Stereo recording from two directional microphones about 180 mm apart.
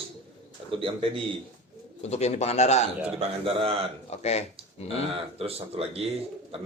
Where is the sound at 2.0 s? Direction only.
35° left (ahead or behind).